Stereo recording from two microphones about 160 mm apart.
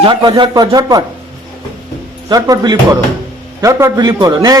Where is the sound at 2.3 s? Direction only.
20° right (ahead or behind).